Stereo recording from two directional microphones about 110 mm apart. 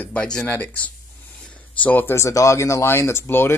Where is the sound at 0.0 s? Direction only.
10° left (ahead or behind).